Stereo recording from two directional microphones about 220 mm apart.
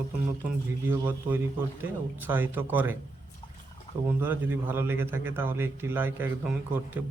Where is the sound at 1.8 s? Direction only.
10° right (ahead or behind).